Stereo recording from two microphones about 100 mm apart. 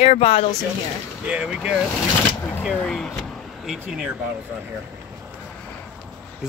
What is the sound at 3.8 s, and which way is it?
Speech, 10° right (ahead or behind).